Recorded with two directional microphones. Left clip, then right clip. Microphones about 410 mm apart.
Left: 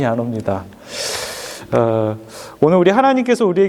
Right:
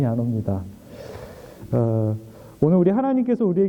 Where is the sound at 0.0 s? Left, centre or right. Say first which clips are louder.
Left 7 dB; centre.